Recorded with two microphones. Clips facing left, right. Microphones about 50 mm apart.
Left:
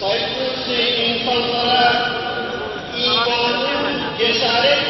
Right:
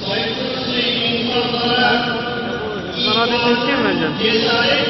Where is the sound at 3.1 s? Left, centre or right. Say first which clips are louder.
Right 3 dB; centre.